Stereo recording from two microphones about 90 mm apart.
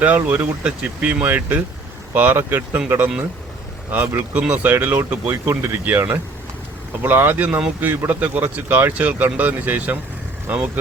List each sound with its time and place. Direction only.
0.0 s speech: 20° right (ahead or behind)